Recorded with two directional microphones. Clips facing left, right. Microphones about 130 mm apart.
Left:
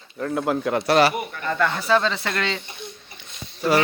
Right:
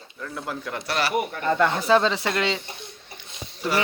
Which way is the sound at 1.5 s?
20° right (ahead or behind).